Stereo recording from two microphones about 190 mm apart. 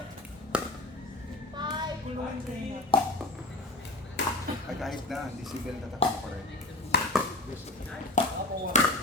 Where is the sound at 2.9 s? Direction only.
25° left (ahead or behind).